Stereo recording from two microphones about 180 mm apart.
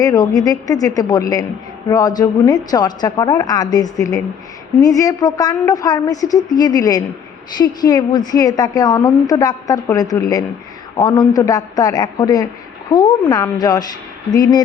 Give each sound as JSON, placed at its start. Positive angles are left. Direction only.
{"t": 0.0, "sound": "a woman's voice", "side_deg": 20}